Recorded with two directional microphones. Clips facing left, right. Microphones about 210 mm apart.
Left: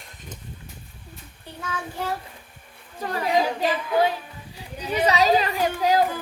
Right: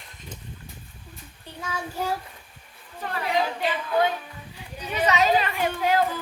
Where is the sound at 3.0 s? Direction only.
40° left (ahead or behind).